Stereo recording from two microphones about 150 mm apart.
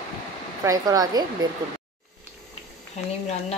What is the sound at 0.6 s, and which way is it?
Speech, 25° right (ahead or behind).